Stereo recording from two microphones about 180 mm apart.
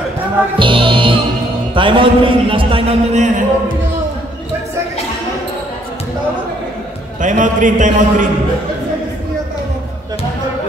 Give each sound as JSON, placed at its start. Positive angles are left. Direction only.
{"t": 0.6, "sound": "music", "side_deg": -30}
{"t": 1.8, "sound": "a man's voice", "side_deg": -30}
{"t": 7.2, "sound": "a man's voice", "side_deg": -45}